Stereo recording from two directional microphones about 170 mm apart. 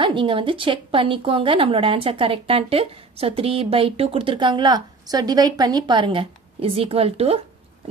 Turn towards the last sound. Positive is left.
turn(degrees=-35)  # may be behind; listen again after turning